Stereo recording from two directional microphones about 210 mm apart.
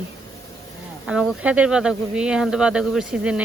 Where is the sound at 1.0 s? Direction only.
5° right (ahead or behind).